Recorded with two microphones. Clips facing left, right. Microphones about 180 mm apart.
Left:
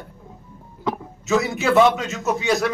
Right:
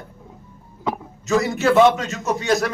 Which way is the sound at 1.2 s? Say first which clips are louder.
Right 2 dB; centre (ahead or behind).